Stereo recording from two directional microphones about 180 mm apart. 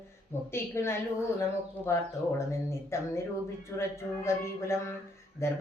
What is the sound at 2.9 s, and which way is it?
Speech, 15° left (ahead or behind).